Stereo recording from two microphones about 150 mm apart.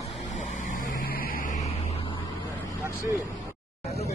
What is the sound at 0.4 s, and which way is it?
Vehicle, 60° left (ahead or behind).